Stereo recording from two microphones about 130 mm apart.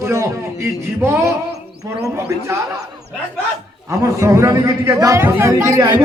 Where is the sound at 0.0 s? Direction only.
20° right (ahead or behind).